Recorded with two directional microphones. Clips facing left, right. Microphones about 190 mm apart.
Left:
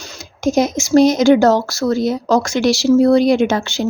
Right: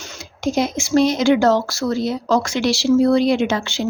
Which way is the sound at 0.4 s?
45° left (ahead or behind).